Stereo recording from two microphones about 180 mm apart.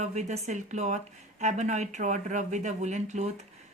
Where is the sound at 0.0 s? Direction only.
40° right (ahead or behind).